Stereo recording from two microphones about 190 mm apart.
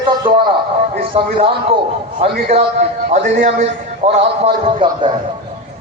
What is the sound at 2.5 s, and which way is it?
A man's voice, 35° right (ahead or behind).